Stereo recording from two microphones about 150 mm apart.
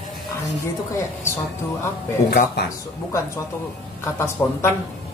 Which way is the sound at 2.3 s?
90° left.